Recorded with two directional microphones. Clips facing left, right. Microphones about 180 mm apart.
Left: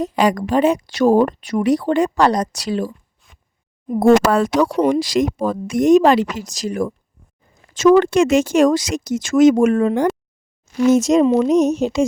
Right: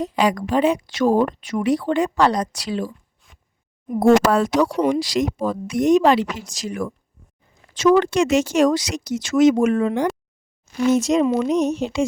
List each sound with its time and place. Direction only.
0.0 s speech: 45° left (ahead or behind)
4.0 s speech: 55° left (ahead or behind)